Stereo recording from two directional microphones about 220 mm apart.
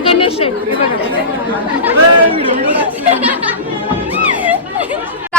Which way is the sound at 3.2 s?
5° right (ahead or behind).